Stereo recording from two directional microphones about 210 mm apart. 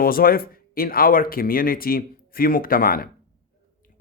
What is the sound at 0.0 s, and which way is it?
Speech, 45° left (ahead or behind).